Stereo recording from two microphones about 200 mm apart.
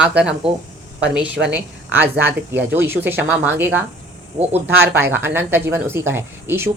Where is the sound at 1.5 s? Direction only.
10° right (ahead or behind).